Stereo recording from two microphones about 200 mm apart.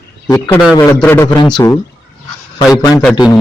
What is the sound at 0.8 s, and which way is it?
Speech, 10° left (ahead or behind).